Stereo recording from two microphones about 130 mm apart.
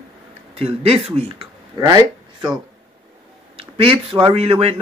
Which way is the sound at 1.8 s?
30° right (ahead or behind).